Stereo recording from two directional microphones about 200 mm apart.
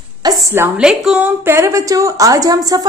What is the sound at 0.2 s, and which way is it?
A woman's voice, 15° right (ahead or behind).